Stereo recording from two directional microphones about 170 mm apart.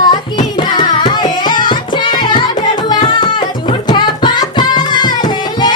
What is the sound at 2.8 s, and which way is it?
Music, 25° left (ahead or behind).